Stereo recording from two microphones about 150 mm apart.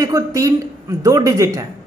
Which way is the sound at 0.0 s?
25° right (ahead or behind).